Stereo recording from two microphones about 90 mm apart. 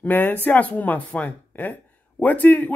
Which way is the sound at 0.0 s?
20° left (ahead or behind).